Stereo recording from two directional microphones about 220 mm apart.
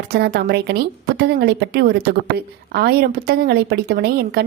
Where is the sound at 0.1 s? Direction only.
45° right (ahead or behind).